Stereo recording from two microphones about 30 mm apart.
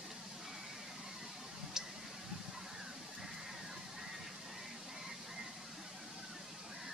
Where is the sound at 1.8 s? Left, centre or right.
Right.